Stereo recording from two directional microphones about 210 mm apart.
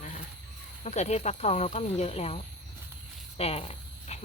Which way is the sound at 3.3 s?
30° left (ahead or behind).